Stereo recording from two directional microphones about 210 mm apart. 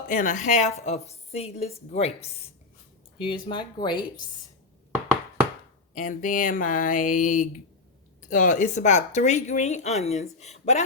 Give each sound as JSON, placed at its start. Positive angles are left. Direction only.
{"t": 0.1, "sound": "a woman's voice", "side_deg": 35}
{"t": 3.2, "sound": "speech", "side_deg": 25}
{"t": 5.9, "sound": "a woman's voice", "side_deg": 35}